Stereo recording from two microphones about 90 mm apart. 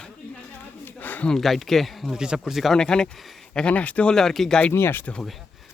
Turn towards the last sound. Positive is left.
turn(degrees=5)  # may be behind; listen again after turning